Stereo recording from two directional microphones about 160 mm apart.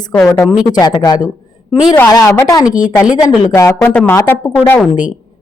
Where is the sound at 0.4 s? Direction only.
5° right (ahead or behind).